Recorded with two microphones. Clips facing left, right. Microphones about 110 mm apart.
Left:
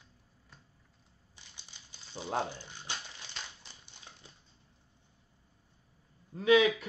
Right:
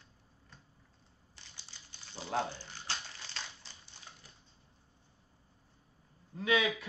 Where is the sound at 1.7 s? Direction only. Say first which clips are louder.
Even; 15° left (ahead or behind).